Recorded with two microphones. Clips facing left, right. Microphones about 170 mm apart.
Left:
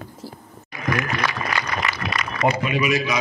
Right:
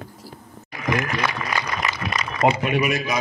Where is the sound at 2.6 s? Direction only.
55° right (ahead or behind).